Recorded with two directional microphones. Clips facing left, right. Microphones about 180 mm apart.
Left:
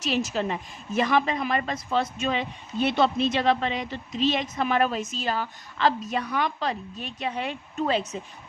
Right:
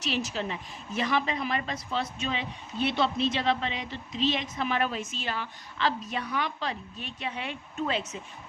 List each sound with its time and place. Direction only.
0.0 s a woman's voice: 45° left (ahead or behind)